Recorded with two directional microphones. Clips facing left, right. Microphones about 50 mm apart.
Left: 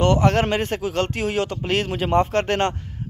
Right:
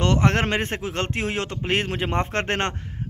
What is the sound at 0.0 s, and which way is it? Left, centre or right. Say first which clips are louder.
Speech: left 3 dB; right.